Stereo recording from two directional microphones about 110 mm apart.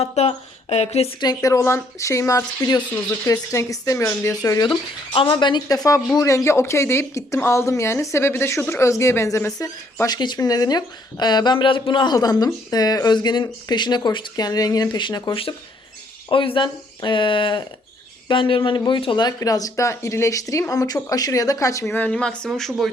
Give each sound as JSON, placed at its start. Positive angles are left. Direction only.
{"t": 0.0, "sound": "speech", "side_deg": 65}
{"t": 1.2, "sound": "speech", "side_deg": 35}
{"t": 9.6, "sound": "speech", "side_deg": 35}
{"t": 12.1, "sound": "speech", "side_deg": 35}
{"t": 19.4, "sound": "speech", "side_deg": 35}
{"t": 21.9, "sound": "speech", "side_deg": 10}